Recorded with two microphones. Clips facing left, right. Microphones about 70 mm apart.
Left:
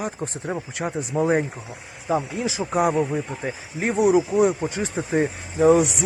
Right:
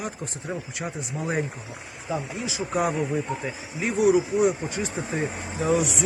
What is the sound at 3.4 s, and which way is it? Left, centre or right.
Speech, left.